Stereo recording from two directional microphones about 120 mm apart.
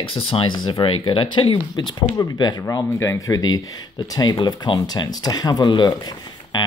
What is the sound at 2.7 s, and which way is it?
Speech, 25° left (ahead or behind).